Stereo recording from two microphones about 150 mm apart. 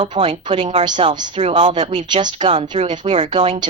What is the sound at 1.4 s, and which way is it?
Speech, 40° right (ahead or behind).